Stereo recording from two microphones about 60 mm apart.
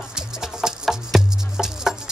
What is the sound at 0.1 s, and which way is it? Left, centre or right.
Music, centre.